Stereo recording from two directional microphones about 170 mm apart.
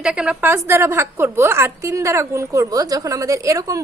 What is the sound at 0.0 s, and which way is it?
A woman's voice, 5° right (ahead or behind).